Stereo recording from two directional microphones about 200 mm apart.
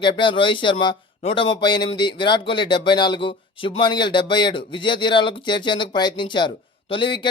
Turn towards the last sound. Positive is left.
turn(degrees=25)  # may be behind; listen again after turning